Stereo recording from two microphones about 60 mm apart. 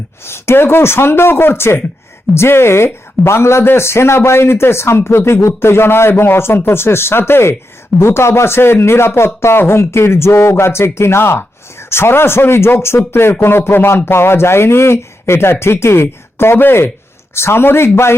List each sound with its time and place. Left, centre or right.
0.3 s speech: left